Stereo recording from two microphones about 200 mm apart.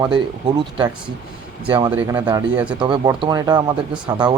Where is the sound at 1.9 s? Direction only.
10° right (ahead or behind).